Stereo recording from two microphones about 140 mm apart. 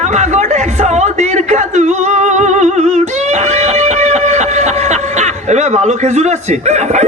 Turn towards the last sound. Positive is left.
turn(degrees=-55)  # may be behind; listen again after turning